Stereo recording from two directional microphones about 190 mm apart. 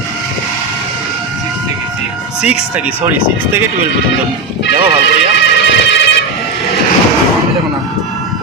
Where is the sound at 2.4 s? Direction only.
5° right (ahead or behind).